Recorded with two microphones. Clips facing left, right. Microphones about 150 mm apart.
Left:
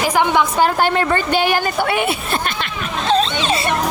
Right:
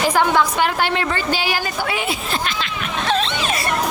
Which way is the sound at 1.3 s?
55° left (ahead or behind).